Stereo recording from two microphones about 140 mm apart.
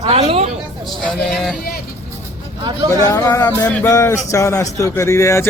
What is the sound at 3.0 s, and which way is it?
A man's voice, 25° left (ahead or behind).